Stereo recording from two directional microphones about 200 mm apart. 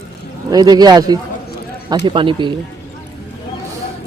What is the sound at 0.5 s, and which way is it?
Speech, 20° right (ahead or behind).